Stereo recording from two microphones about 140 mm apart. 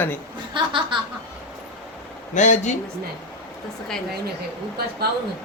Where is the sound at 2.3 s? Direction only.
60° left (ahead or behind).